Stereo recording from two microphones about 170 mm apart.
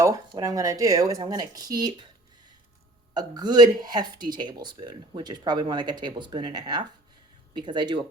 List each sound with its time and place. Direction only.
0.3 s speech: 20° right (ahead or behind)
3.2 s speech: 25° right (ahead or behind)